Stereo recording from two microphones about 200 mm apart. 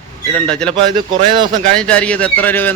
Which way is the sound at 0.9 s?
20° right (ahead or behind).